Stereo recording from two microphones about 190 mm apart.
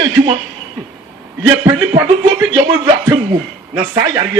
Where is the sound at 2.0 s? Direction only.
25° right (ahead or behind).